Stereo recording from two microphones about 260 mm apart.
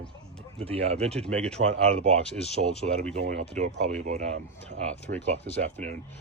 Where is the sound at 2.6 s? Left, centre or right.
Right.